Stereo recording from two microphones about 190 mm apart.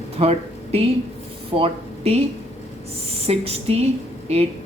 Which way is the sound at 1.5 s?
30° right (ahead or behind).